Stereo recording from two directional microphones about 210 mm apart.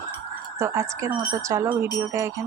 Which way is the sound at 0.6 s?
15° right (ahead or behind).